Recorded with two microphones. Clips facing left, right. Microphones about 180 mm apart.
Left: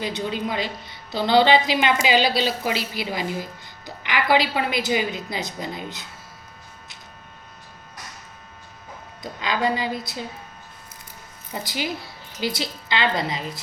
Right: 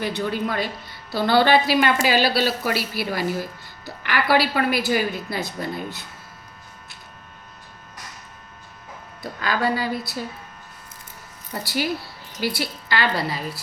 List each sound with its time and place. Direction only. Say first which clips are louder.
0.4 s a woman's voice: right 1 dB; 20° left (ahead or behind)
9.4 s a woman's voice: even; 20° left (ahead or behind)
11.5 s a woman's voice: right 3 dB; 15° left (ahead or behind)